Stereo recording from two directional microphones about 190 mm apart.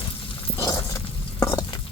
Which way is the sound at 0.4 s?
25° left (ahead or behind).